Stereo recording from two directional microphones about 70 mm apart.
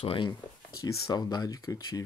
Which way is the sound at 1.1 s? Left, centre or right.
Left.